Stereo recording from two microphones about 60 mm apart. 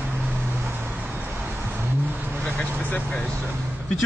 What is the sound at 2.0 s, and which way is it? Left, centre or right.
Vehicle, right.